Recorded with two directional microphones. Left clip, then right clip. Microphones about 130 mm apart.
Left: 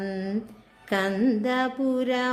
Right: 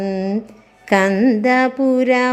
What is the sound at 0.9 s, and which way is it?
Mantra, 40° right (ahead or behind).